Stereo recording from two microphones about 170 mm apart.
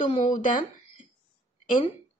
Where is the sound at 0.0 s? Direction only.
50° left (ahead or behind).